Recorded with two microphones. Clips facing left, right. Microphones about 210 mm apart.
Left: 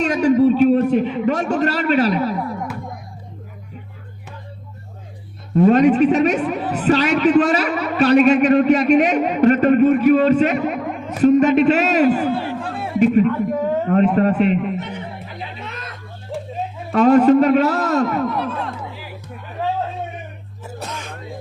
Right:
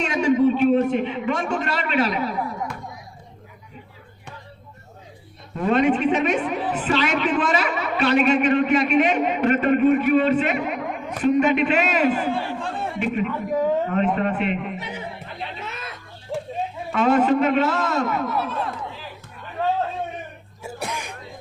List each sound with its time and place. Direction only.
0.0 s a sound: 40° left (ahead or behind)
5.5 s a man's voice: 40° left (ahead or behind)
10.6 s music: centre (ahead or behind)
11.2 s a man's voice: 40° left (ahead or behind)
12.3 s a sound: 5° left (ahead or behind)
13.2 s a man's voice: centre (ahead or behind)
14.2 s a man's voice: 40° left (ahead or behind)
14.8 s music: 10° right (ahead or behind)
16.9 s a man's voice: 40° left (ahead or behind)
18.3 s a man's voice: 5° right (ahead or behind)
19.6 s a sound: 10° left (ahead or behind)
20.7 s music: 10° right (ahead or behind)